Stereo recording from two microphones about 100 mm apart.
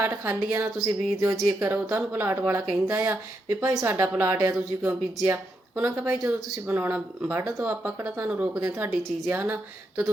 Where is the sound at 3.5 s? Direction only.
30° right (ahead or behind).